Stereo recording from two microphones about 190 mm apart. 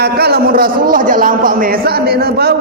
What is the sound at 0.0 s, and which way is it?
A man's voice, 55° right (ahead or behind).